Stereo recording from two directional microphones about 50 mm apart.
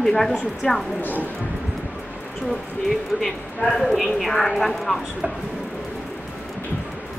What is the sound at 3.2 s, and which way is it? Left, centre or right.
A woman's voice, centre.